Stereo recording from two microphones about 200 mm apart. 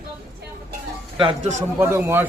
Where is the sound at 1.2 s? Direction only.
35° right (ahead or behind).